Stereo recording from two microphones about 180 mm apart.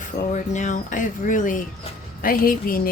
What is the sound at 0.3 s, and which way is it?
Speech, 45° left (ahead or behind).